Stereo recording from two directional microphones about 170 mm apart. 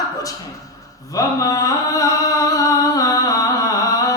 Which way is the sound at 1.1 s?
20° left (ahead or behind).